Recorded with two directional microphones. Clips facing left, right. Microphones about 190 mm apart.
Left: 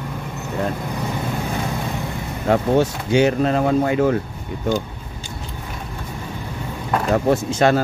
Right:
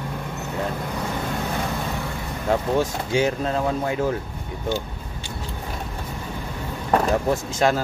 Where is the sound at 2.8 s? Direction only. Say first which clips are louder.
Left 5 dB; 70° left (ahead or behind).